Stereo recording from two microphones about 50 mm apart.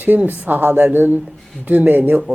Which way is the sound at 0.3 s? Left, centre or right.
Right.